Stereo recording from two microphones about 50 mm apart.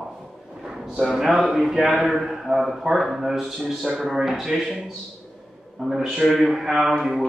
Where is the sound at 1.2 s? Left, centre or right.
Centre.